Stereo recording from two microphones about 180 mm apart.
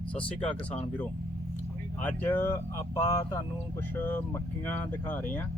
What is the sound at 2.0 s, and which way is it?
Speech, 10° left (ahead or behind).